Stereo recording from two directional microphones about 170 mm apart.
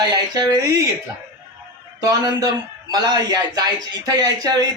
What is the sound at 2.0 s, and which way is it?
A man's voice, 20° right (ahead or behind).